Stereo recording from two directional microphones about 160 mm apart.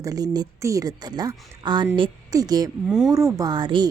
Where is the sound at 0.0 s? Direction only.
25° right (ahead or behind).